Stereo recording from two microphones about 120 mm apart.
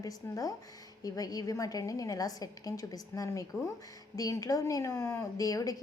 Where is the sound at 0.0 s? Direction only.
25° left (ahead or behind).